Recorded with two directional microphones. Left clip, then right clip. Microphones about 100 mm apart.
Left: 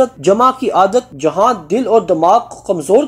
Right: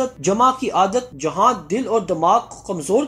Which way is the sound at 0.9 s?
40° left (ahead or behind).